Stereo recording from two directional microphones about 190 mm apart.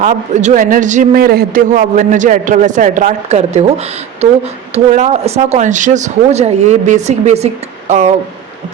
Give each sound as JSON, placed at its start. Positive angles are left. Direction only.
{"t": 0.0, "sound": "a man's voice", "side_deg": -40}
{"t": 4.7, "sound": "a man's voice", "side_deg": -35}